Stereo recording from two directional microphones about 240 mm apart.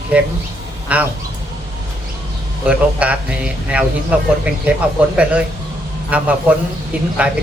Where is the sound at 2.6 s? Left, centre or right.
Centre.